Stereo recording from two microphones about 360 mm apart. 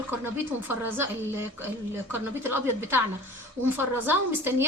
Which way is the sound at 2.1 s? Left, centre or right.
Centre.